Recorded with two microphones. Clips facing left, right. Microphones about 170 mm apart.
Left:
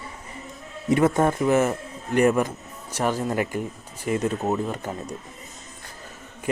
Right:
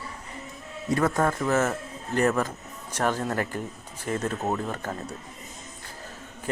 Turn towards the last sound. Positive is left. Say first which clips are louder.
# left 2 dB
turn(degrees=15)  # may be behind; listen again after turning